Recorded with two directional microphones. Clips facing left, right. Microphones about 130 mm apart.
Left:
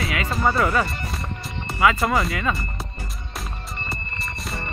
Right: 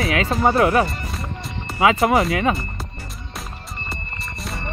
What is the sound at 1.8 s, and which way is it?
Speech, 25° right (ahead or behind).